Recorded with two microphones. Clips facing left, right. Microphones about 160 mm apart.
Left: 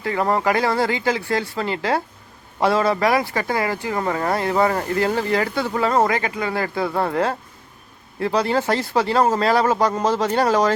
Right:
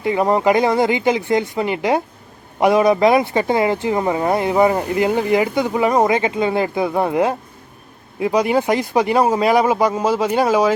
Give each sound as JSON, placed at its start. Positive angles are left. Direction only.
{"t": 0.0, "sound": "speech", "side_deg": -20}